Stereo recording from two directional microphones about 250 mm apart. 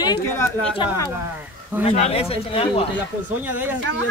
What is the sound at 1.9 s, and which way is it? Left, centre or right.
Speech, left.